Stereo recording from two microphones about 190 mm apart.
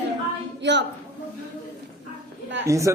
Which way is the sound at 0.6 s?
65° right (ahead or behind).